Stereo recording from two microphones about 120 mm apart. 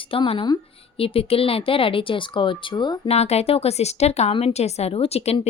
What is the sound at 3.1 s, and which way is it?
Speech, 60° left (ahead or behind).